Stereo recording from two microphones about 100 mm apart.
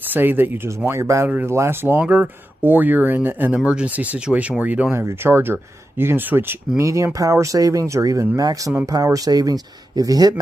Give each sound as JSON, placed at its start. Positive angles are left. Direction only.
{"t": 0.1, "sound": "speech", "side_deg": -20}
{"t": 4.9, "sound": "speech", "side_deg": -25}
{"t": 6.8, "sound": "speech", "side_deg": -30}